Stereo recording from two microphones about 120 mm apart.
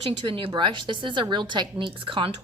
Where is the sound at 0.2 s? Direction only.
45° right (ahead or behind).